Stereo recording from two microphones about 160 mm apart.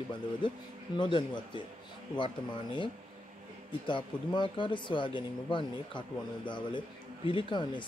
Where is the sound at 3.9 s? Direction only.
30° left (ahead or behind).